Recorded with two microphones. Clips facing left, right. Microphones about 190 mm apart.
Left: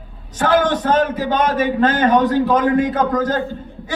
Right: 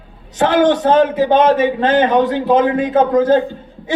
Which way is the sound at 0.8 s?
20° right (ahead or behind).